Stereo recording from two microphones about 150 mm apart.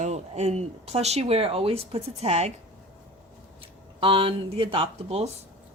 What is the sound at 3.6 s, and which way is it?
Speech, 40° right (ahead or behind).